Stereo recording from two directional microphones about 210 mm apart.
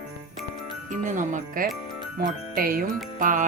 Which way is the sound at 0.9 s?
35° right (ahead or behind).